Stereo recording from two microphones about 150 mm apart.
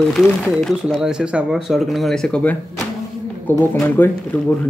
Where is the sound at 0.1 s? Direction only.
5° left (ahead or behind).